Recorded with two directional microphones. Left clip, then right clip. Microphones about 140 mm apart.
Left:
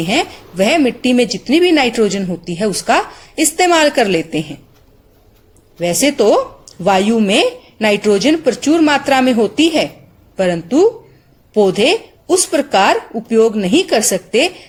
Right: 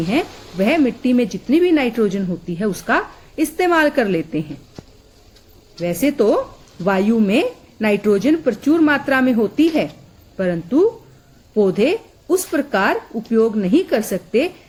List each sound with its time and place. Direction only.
0.1 s speech: 35° left (ahead or behind)
5.8 s speech: 30° left (ahead or behind)